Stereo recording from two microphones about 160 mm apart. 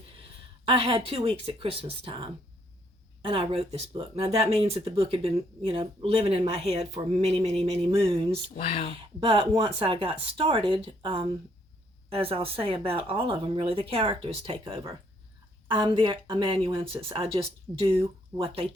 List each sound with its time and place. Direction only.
0.6 s speech: 35° right (ahead or behind)